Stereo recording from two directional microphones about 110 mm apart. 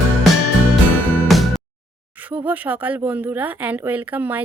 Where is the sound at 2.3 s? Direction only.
15° right (ahead or behind).